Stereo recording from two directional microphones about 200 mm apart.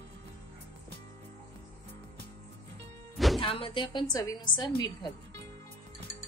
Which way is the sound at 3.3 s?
25° left (ahead or behind).